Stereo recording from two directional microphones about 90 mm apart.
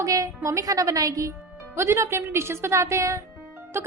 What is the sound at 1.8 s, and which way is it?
A woman's voice, 30° right (ahead or behind).